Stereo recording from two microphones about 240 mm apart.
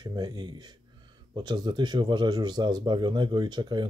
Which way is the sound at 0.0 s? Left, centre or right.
Centre.